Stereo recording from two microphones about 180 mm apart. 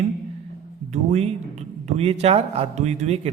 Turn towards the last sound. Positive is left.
turn(degrees=-35)  # may be behind; listen again after turning